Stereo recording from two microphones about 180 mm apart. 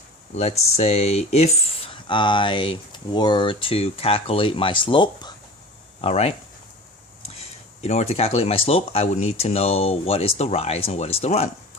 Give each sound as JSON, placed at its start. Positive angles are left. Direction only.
{"t": 0.3, "sound": "speech", "side_deg": 35}
{"t": 7.3, "sound": "speech", "side_deg": 35}